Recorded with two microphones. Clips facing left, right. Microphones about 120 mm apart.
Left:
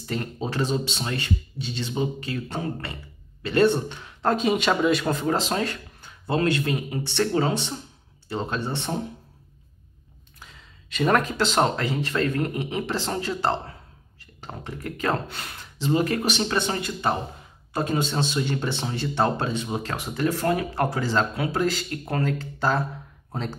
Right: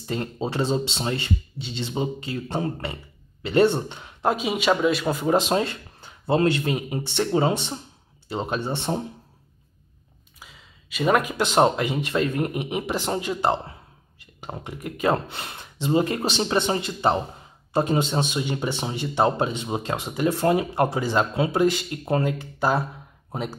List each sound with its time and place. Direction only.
0.0 s speech: 25° right (ahead or behind)
4.3 s speech: 5° right (ahead or behind); by 9.0 s 20° right (ahead or behind)
10.4 s speech: 5° right (ahead or behind)